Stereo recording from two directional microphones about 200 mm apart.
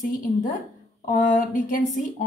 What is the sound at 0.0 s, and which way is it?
Speech, 40° left (ahead or behind).